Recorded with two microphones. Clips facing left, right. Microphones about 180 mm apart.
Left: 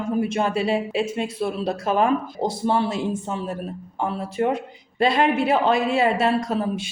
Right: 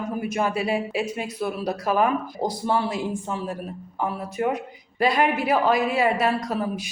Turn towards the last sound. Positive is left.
turn(degrees=25)  # may be behind; listen again after turning